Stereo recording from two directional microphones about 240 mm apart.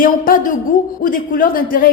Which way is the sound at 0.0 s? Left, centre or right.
Left.